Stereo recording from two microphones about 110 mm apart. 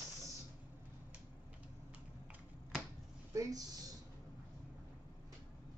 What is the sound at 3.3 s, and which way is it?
Speech, 30° right (ahead or behind).